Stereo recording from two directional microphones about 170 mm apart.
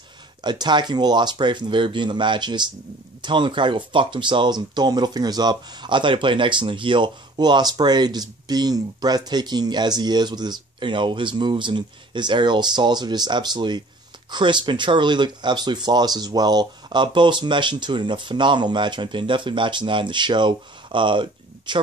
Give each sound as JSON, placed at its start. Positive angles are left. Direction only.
{"t": 0.4, "sound": "speech", "side_deg": -25}